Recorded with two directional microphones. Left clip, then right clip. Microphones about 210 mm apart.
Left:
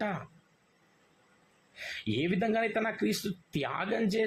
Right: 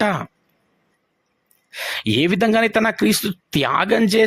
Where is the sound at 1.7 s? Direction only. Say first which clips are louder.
Right 14 dB; 55° right (ahead or behind).